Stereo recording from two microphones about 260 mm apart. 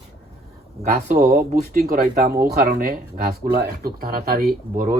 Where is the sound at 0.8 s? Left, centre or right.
Right.